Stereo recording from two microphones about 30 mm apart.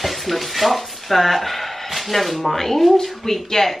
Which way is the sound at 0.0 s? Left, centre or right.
Centre.